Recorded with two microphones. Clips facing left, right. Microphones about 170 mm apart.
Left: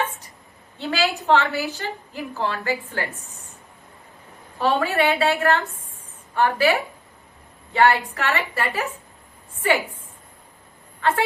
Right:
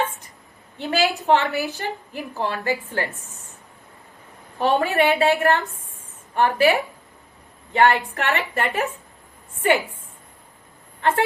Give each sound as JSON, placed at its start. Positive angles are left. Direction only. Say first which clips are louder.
{"t": 0.8, "sound": "a sound", "louder": "right 2 dB", "side_deg": -15}
{"t": 1.3, "sound": "a woman's voice", "louder": "left 1 dB", "side_deg": -15}
{"t": 4.5, "sound": "a woman's voice", "louder": "right 1 dB", "side_deg": -20}